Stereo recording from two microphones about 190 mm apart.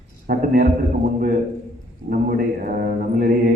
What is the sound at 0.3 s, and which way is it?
Speech, 55° right (ahead or behind).